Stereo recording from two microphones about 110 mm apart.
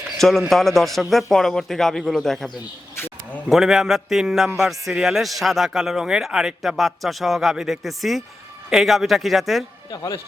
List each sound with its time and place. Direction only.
0.2 s a man's voice: centre (ahead or behind)
3.5 s a man's voice: 5° right (ahead or behind)